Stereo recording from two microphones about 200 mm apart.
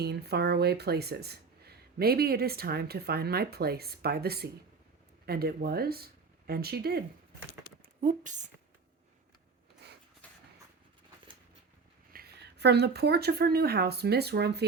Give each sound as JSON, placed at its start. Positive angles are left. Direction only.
{"t": 0.0, "sound": "speech", "side_deg": -55}
{"t": 8.0, "sound": "speech", "side_deg": -40}
{"t": 10.2, "sound": "a sound", "side_deg": 5}
{"t": 12.1, "sound": "speech", "side_deg": -55}